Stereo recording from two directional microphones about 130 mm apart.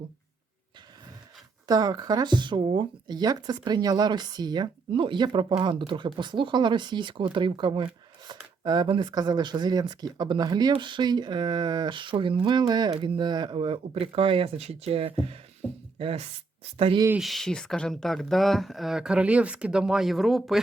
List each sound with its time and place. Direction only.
1.6 s speech: 30° right (ahead or behind); by 17.0 s 50° right (ahead or behind)
17.2 s speech: centre (ahead or behind)